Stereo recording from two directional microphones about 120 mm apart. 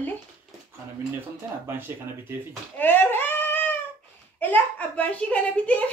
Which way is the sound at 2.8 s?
15° left (ahead or behind).